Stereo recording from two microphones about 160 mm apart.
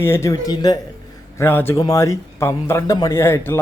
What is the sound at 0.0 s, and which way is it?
Speech, 15° left (ahead or behind).